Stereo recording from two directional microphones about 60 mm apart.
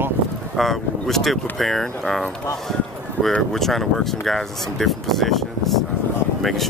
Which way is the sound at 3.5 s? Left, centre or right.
Centre.